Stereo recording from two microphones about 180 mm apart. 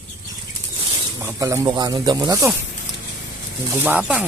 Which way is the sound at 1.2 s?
15° right (ahead or behind).